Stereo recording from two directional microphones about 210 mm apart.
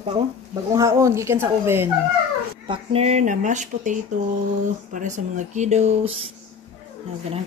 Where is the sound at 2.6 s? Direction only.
25° right (ahead or behind).